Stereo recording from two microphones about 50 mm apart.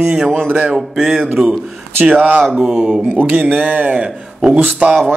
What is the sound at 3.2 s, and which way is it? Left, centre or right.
Speech, right.